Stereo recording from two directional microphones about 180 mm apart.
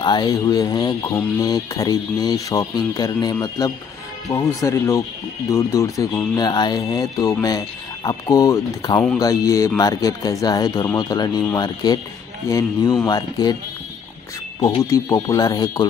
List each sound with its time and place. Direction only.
0.0 s speech: 25° left (ahead or behind)
14.6 s speech: 20° left (ahead or behind)